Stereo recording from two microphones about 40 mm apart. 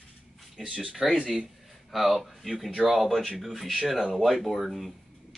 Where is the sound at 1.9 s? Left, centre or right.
Centre.